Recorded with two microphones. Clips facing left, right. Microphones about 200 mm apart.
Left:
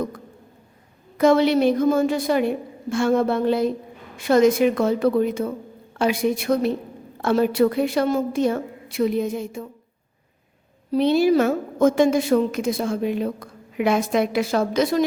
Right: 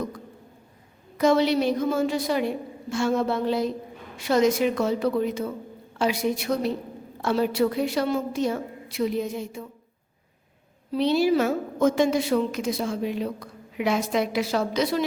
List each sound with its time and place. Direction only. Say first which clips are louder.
1.2 s a woman's voice: left 4 dB; 55° left (ahead or behind)
10.9 s a woman's voice: left 4 dB; 50° left (ahead or behind)